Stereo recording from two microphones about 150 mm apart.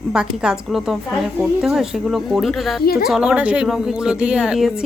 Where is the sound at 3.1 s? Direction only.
5° right (ahead or behind).